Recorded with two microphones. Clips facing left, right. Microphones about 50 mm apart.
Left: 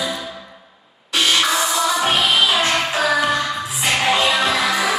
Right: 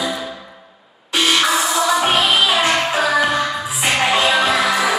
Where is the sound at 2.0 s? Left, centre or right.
Centre.